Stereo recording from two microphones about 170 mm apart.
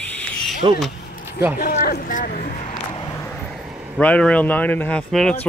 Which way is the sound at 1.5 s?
50° left (ahead or behind).